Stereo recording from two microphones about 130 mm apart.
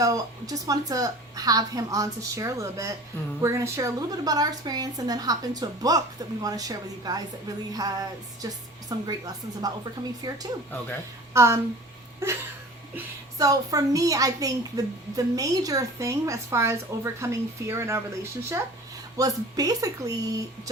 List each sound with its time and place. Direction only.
0.0 s a woman's voice: 25° right (ahead or behind)
11.3 s a woman's voice: 20° right (ahead or behind)
13.4 s a woman's voice: 25° right (ahead or behind)